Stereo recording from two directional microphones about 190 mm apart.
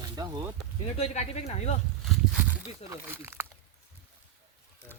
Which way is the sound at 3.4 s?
15° right (ahead or behind).